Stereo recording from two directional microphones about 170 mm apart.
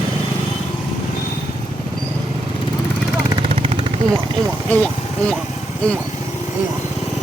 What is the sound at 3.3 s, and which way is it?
Vehicle, 30° right (ahead or behind).